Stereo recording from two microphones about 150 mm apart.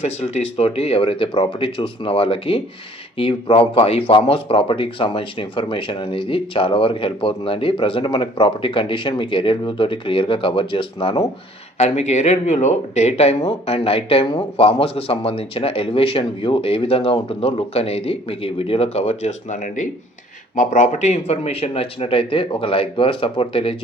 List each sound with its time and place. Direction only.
0.0 s speech: 45° left (ahead or behind)
11.8 s speech: 50° left (ahead or behind)